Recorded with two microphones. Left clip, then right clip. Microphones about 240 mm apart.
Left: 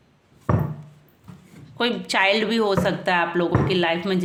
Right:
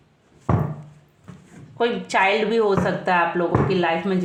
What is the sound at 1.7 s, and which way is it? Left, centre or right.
Speech, left.